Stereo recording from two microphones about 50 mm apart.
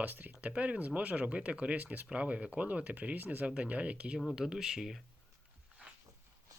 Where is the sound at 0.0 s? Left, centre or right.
Right; by 5.0 s centre.